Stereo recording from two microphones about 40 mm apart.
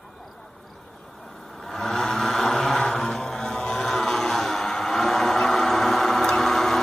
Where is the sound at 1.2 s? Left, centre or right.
Centre.